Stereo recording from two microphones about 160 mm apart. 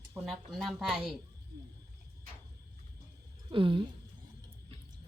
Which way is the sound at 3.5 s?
30° right (ahead or behind).